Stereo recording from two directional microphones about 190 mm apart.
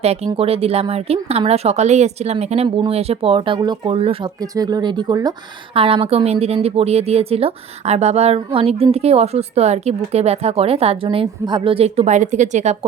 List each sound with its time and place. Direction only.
0.0 s a woman's voice: 35° right (ahead or behind)